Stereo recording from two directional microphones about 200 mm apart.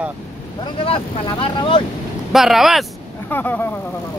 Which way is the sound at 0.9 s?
25° left (ahead or behind).